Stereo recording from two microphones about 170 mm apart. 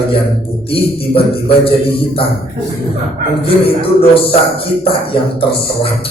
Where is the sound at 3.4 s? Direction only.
35° left (ahead or behind).